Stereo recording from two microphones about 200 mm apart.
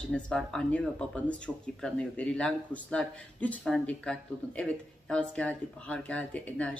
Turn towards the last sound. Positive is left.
turn(degrees=5)  # may be behind; listen again after turning